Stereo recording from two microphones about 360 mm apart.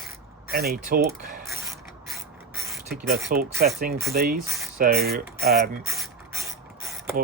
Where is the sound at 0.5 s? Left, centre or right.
Right.